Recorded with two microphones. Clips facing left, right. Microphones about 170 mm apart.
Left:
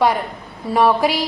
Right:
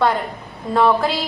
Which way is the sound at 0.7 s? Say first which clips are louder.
Left 1 dB; 10° left (ahead or behind).